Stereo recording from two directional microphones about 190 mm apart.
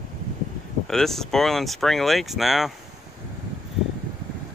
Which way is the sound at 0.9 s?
Centre (ahead or behind).